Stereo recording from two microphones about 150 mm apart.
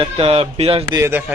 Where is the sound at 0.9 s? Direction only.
20° right (ahead or behind).